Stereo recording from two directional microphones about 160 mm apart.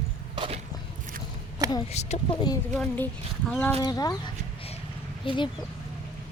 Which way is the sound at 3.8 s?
25° left (ahead or behind).